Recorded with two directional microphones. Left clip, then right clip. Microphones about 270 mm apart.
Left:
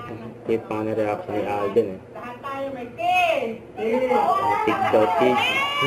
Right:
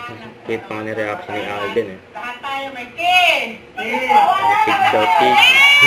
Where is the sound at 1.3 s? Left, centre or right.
Centre.